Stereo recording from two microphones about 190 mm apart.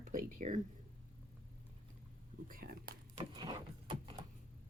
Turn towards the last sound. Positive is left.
turn(degrees=-25)  # may be behind; listen again after turning